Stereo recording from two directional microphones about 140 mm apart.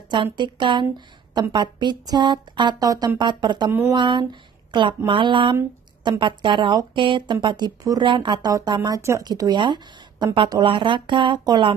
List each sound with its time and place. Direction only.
0.1 s a woman's voice: 35° right (ahead or behind)